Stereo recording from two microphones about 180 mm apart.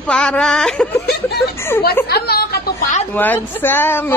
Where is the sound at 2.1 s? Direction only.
60° left (ahead or behind).